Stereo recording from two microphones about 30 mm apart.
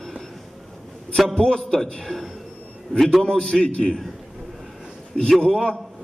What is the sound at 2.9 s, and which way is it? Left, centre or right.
Speech, left.